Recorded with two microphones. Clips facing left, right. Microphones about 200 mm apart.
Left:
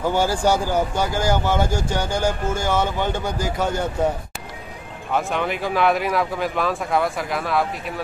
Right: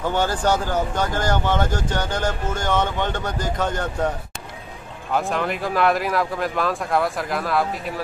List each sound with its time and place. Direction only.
0.0 s speech: 10° left (ahead or behind)
5.1 s speech: centre (ahead or behind)